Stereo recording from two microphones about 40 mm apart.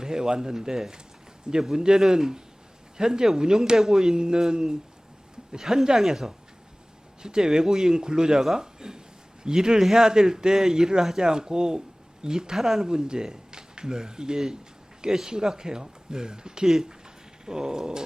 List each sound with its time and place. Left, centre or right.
0.0 s speech: centre